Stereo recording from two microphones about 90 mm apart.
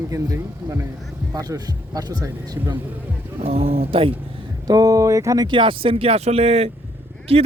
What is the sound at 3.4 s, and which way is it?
Speech, 90° right.